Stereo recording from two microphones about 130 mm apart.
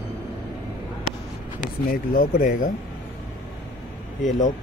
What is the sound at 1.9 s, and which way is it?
Speech, 90° left.